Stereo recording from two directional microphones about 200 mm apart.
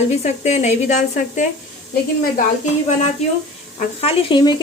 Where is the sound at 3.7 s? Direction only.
30° left (ahead or behind).